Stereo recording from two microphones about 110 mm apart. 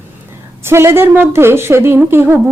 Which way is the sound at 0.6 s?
25° right (ahead or behind).